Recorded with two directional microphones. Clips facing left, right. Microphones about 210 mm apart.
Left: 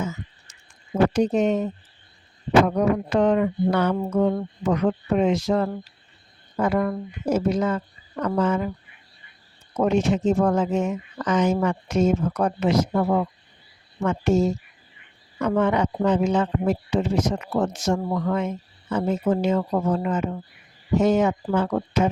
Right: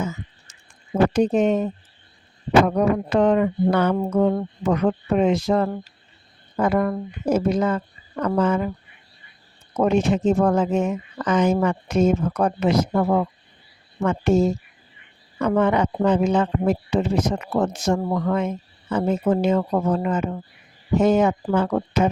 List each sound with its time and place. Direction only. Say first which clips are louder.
1.1 s speech: right 2 dB; 55° right (ahead or behind)
9.7 s speech: right 2 dB; 55° right (ahead or behind)